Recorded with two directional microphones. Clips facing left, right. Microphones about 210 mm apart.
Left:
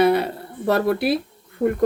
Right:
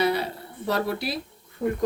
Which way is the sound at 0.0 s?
55° left (ahead or behind).